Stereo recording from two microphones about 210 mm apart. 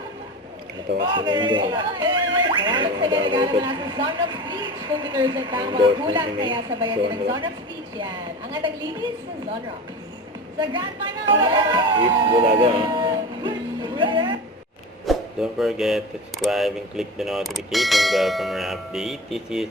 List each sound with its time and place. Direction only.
1.1 s speech: 20° right (ahead or behind)
10.6 s speech: 20° right (ahead or behind)
15.0 s speech: centre (ahead or behind)